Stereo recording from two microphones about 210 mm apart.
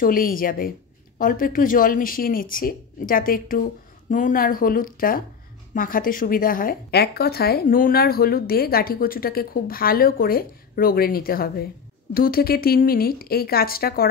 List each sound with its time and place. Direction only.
0.0 s a woman's voice: 40° left (ahead or behind)